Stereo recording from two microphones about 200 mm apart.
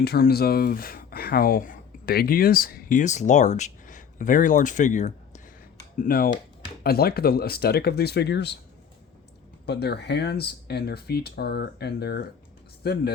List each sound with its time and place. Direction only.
0.0 s speech: 50° left (ahead or behind)
9.6 s speech: 55° left (ahead or behind)